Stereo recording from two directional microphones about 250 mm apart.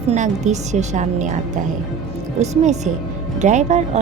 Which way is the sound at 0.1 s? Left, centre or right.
Right.